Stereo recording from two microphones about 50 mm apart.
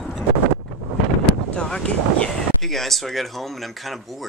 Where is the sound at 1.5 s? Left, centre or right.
Centre.